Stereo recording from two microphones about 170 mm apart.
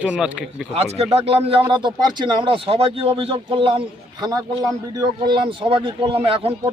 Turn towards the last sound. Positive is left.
turn(degrees=-35)  # may be behind; listen again after turning